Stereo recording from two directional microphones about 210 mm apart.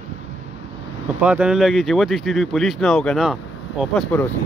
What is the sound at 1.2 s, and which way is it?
Speech, 5° right (ahead or behind).